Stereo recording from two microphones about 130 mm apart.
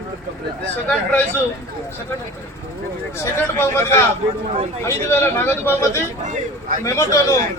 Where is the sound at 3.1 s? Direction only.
20° left (ahead or behind).